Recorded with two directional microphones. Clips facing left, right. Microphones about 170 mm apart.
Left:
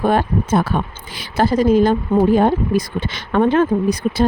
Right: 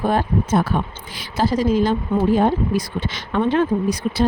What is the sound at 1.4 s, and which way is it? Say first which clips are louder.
Speech: left 4 dB; 55° left (ahead or behind).